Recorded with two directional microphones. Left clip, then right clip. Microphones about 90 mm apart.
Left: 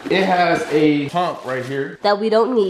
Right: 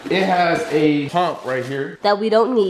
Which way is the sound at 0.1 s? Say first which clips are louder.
Left 1 dB; 15° left (ahead or behind).